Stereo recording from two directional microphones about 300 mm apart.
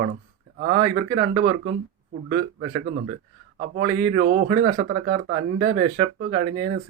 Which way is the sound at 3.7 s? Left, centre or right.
Right.